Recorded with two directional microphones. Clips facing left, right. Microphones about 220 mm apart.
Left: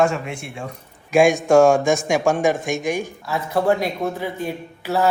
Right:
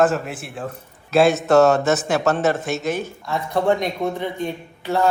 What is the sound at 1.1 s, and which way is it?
Speech, 15° left (ahead or behind).